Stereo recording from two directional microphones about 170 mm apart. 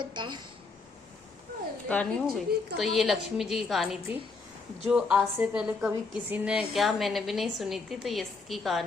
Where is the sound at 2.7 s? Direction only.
Centre (ahead or behind).